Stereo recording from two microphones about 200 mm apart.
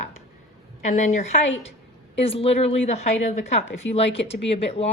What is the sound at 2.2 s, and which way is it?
A woman's voice, 30° left (ahead or behind).